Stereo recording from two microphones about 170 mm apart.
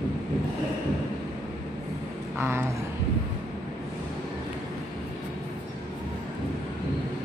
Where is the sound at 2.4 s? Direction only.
15° right (ahead or behind).